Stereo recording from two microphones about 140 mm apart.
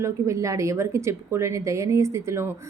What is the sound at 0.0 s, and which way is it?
A woman's voice, 20° right (ahead or behind).